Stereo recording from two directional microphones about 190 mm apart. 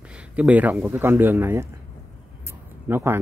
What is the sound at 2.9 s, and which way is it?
Speech, 10° right (ahead or behind).